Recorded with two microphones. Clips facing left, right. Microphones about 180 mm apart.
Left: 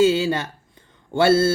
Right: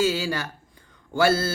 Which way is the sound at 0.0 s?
25° left (ahead or behind).